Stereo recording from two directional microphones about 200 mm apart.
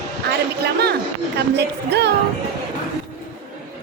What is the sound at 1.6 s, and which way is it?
Speech, 60° right (ahead or behind).